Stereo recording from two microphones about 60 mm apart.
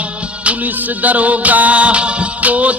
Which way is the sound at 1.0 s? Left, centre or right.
Right.